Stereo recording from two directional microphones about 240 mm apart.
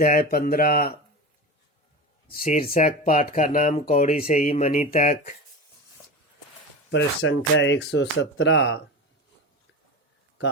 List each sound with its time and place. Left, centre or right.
0.0 s speech: left
2.4 s speech: left
6.9 s speech: left